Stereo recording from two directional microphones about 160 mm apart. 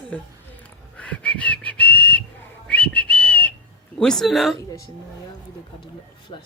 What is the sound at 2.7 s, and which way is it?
Whistling, 5° left (ahead or behind).